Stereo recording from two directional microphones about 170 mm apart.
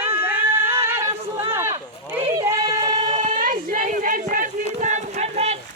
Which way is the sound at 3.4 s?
55° right (ahead or behind).